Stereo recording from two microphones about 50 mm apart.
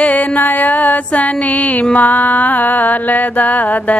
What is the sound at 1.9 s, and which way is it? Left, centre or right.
Mantra, left.